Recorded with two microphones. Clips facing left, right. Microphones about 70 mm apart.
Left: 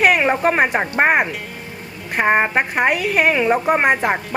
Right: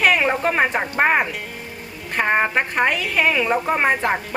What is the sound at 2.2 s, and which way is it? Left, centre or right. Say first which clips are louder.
Speech: left 3 dB; centre.